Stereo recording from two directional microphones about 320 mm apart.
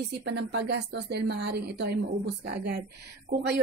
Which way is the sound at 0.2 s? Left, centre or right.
Right.